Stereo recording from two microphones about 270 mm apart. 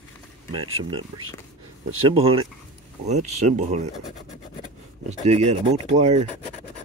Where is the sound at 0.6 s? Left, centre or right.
Right.